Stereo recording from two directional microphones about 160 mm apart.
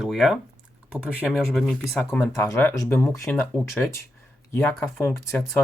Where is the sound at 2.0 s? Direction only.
15° left (ahead or behind).